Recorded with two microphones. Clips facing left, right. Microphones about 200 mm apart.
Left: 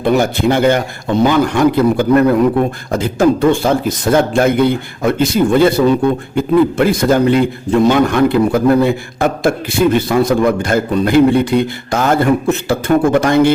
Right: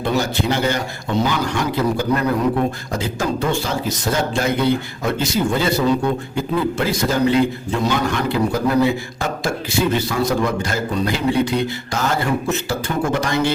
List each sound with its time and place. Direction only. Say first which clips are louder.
0.0 s a man's voice: left 7 dB; 55° left (ahead or behind)